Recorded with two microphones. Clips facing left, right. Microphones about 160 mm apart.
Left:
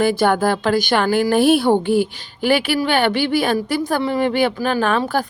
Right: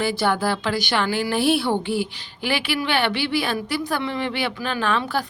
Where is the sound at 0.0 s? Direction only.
50° left (ahead or behind).